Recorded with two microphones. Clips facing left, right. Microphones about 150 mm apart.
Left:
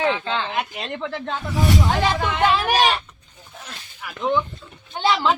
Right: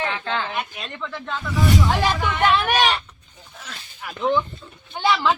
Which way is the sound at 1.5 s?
20° left (ahead or behind).